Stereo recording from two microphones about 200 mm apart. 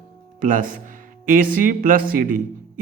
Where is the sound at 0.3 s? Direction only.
40° right (ahead or behind).